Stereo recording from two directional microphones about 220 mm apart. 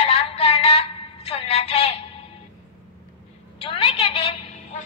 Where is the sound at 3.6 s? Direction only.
25° left (ahead or behind).